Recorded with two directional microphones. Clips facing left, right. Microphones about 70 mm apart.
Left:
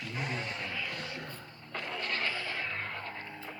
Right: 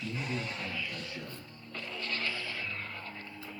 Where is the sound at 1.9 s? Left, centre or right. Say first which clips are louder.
Left 2 dB; left.